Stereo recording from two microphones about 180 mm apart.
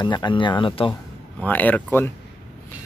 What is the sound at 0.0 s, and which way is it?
Speech, 25° left (ahead or behind).